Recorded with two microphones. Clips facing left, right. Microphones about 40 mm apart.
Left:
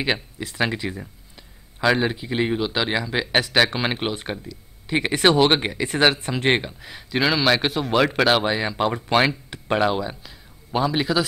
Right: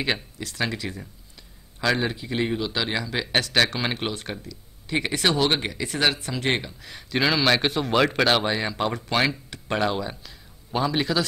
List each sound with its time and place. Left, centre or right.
0.0 s speech: centre
6.9 s a man's voice: centre